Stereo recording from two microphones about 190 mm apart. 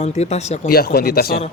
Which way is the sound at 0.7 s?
55° left (ahead or behind).